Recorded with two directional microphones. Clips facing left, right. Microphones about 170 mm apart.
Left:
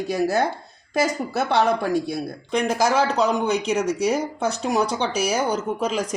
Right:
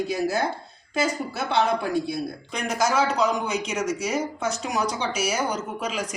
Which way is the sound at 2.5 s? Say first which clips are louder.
Left 4 dB; 30° left (ahead or behind).